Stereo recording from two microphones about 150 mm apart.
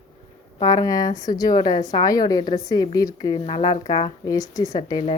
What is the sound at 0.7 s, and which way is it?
Speech, 25° left (ahead or behind).